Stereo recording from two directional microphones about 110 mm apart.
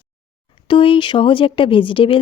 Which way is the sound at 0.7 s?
55° left (ahead or behind).